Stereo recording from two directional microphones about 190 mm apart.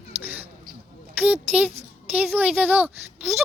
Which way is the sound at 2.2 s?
10° right (ahead or behind).